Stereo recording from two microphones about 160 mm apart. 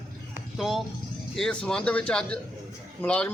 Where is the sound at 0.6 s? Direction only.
Centre (ahead or behind).